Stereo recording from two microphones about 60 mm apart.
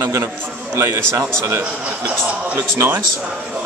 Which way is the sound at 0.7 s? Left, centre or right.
Right.